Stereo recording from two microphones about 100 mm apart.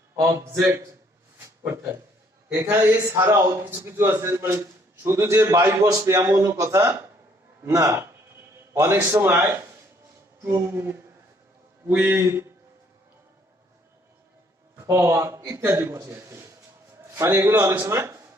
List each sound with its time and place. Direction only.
0.2 s a man's voice: 30° right (ahead or behind)
2.5 s a man's voice: 20° right (ahead or behind)
10.4 s a man's voice: 25° right (ahead or behind)
14.8 s a man's voice: 30° right (ahead or behind)